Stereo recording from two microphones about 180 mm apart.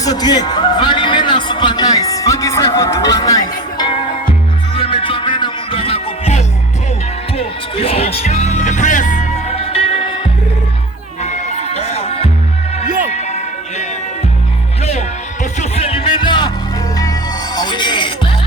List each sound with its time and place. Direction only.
0.0 s music: 20° left (ahead or behind)
11.2 s music: 40° left (ahead or behind)
15.7 s music: 30° left (ahead or behind)